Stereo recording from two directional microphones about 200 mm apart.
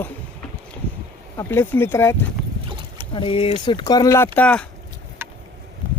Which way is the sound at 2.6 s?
25° right (ahead or behind).